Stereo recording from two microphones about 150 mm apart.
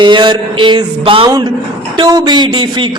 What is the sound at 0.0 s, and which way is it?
A woman's voice, 30° right (ahead or behind).